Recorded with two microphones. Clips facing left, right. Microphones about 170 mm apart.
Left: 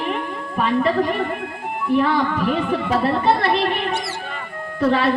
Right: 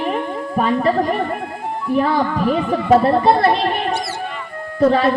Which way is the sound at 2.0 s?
35° right (ahead or behind).